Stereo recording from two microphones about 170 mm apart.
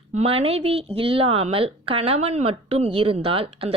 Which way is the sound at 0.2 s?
35° right (ahead or behind).